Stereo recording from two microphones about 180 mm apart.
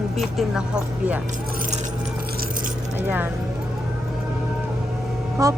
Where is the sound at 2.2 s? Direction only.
55° right (ahead or behind).